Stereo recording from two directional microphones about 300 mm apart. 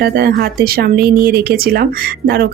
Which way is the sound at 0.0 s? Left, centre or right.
Right.